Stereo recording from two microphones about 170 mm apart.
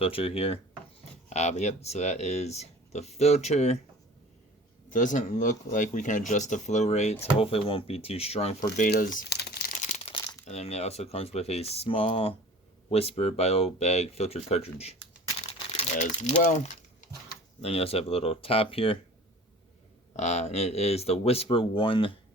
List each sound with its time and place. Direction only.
0.0 s speech: 35° left (ahead or behind)
4.9 s speech: 50° left (ahead or behind)
8.9 s crumpling: 65° left (ahead or behind)
9.8 s crumpling: 40° left (ahead or behind)
10.4 s speech: 40° left (ahead or behind)
17.6 s speech: 35° left (ahead or behind)
20.1 s speech: 40° left (ahead or behind)